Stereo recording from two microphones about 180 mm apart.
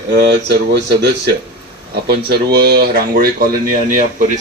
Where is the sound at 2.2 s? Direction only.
60° right (ahead or behind).